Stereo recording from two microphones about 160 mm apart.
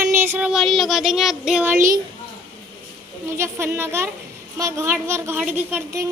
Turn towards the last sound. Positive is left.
turn(degrees=-10)  # may be behind; listen again after turning